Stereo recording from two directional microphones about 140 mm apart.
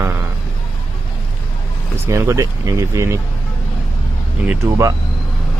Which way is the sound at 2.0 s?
20° right (ahead or behind).